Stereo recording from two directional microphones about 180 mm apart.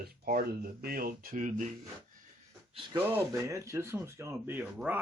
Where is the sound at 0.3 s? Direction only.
55° right (ahead or behind).